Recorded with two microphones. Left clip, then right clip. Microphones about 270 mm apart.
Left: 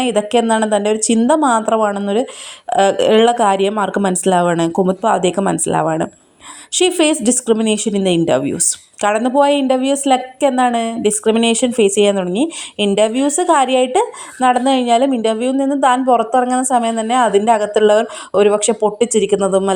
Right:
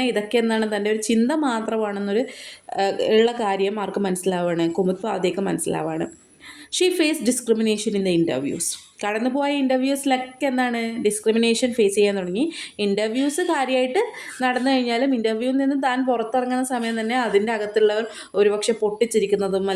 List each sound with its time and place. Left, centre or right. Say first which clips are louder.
0.0 s a woman's voice: left 6 dB; left